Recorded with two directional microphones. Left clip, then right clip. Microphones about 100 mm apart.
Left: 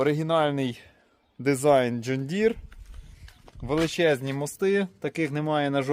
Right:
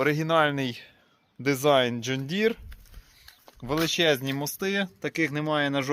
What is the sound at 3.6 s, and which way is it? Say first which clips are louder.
Speech: left 1 dB; 35° left (ahead or behind).